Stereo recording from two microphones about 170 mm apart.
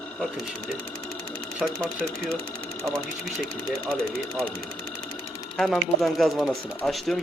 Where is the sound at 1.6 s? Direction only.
5° left (ahead or behind).